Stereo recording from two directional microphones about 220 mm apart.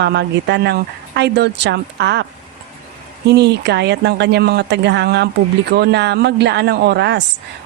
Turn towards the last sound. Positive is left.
turn(degrees=-50)  # may be behind; listen again after turning